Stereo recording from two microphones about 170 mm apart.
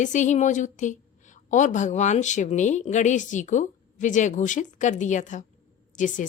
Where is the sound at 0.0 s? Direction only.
45° left (ahead or behind).